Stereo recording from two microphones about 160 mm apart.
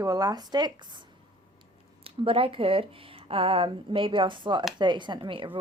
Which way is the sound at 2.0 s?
35° right (ahead or behind).